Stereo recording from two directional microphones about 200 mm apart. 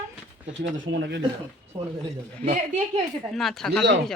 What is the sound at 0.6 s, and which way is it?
Speech, 60° right (ahead or behind).